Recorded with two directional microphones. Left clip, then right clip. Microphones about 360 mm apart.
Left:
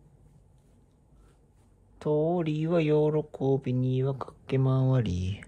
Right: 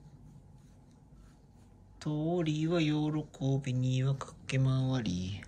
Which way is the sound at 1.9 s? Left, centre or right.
Centre.